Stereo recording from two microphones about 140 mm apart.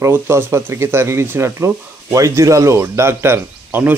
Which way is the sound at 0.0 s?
15° right (ahead or behind).